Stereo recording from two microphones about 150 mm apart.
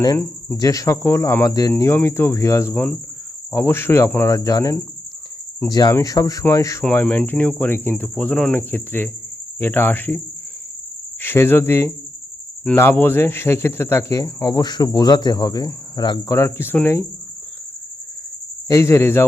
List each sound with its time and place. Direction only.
0.5 s speech: 25° left (ahead or behind)
1.7 s speech: 15° left (ahead or behind)
2.7 s speech: 5° left (ahead or behind)
6.9 s speech: 10° left (ahead or behind)
11.2 s cricket: 15° left (ahead or behind)
12.6 s speech: 15° left (ahead or behind)
16.3 s speech: 15° left (ahead or behind)
18.7 s speech: 20° left (ahead or behind)